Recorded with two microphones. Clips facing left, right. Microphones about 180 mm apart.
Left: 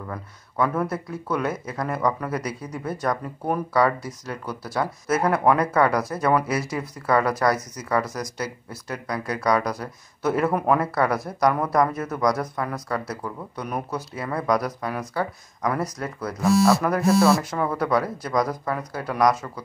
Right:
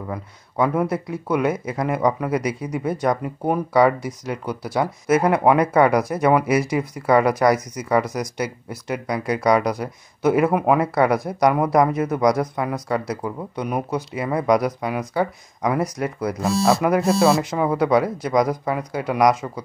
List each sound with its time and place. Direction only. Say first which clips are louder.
0.1 s speech: right 4 dB; 15° right (ahead or behind)
16.4 s speech: left 2 dB; 30° right (ahead or behind)
17.5 s speech: right 5 dB; 15° right (ahead or behind)